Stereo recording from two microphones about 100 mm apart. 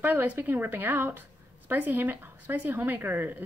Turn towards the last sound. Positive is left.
turn(degrees=-20)  # may be behind; listen again after turning